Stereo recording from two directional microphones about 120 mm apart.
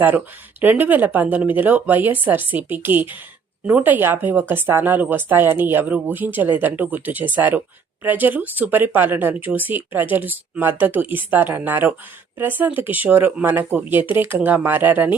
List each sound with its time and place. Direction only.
0.6 s speech: 15° right (ahead or behind)